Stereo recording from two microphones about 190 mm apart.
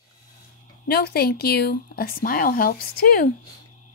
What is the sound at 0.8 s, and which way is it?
Speech, 55° left (ahead or behind).